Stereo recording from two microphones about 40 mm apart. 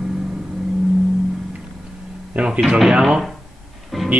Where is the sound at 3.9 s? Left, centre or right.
Centre.